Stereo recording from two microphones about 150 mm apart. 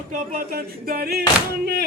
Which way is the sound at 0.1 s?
80° right.